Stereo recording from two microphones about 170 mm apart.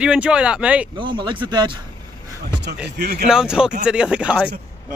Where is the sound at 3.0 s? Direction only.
70° right (ahead or behind).